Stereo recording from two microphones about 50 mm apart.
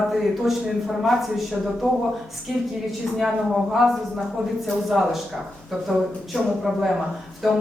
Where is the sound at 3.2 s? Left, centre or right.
Centre.